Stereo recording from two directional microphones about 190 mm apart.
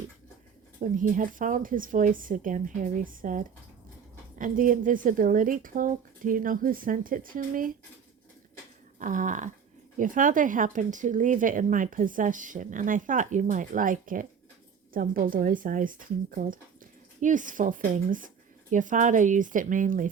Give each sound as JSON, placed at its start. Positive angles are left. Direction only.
{"t": 0.8, "sound": "speech", "side_deg": -45}
{"t": 9.0, "sound": "a sound", "side_deg": -40}
{"t": 10.0, "sound": "speech", "side_deg": -45}